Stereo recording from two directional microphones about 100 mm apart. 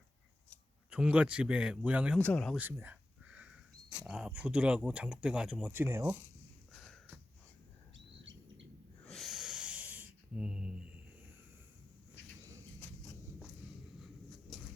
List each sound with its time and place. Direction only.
0.9 s speech: 10° right (ahead or behind)
2.1 s speech: 15° left (ahead or behind)
2.6 s a sound: 20° right (ahead or behind)
4.0 s speech: 10° right (ahead or behind)
5.6 s speech: 25° right (ahead or behind)
6.7 s sniff: centre (ahead or behind)
9.0 s wheeze: centre (ahead or behind)